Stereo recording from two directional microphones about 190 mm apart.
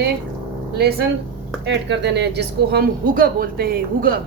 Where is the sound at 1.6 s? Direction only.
65° right (ahead or behind).